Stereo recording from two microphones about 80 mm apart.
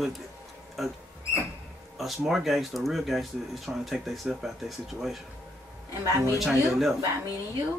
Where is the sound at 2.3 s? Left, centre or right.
Centre.